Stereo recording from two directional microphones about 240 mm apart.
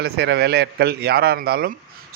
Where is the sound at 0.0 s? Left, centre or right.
Right.